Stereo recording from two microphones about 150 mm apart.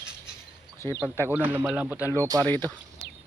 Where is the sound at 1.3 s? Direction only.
15° right (ahead or behind).